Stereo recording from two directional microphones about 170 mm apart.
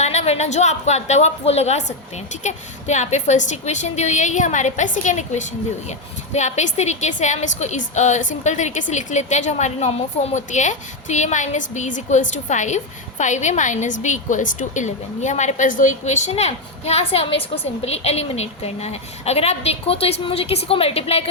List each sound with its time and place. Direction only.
0.0 s a woman's voice: 40° left (ahead or behind)